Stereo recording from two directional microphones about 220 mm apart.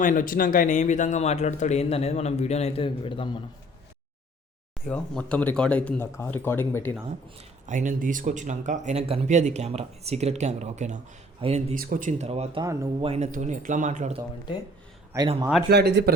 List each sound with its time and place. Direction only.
0.0 s speech: 35° left (ahead or behind)
4.9 s speech: 5° left (ahead or behind)
7.7 s speech: 35° right (ahead or behind)
11.7 s speech: 40° right (ahead or behind)
12.6 s speech: 15° right (ahead or behind)
13.1 s speech: 30° right (ahead or behind)
15.1 s a man's voice: 20° right (ahead or behind)
15.7 s speech: 50° right (ahead or behind)